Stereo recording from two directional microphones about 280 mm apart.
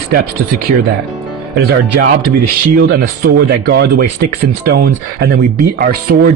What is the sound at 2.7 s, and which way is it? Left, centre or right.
Speech, right.